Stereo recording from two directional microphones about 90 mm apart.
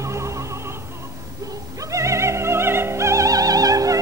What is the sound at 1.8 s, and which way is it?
Opera, 35° right (ahead or behind).